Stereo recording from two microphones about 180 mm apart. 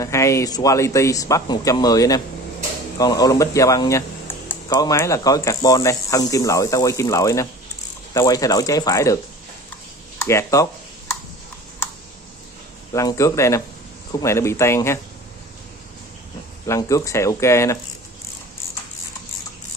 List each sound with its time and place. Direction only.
0.0 s speech: 15° left (ahead or behind)
12.9 s speech: 20° left (ahead or behind)
16.6 s speech: 15° left (ahead or behind)